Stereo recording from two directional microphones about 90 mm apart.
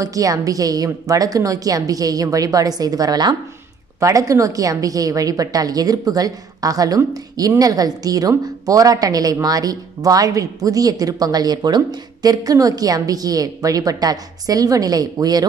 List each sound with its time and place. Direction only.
0.0 s a woman's voice: 40° right (ahead or behind)
4.0 s a woman's voice: 40° right (ahead or behind)